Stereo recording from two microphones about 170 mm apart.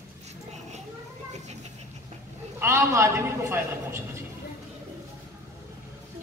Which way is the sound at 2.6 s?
15° right (ahead or behind).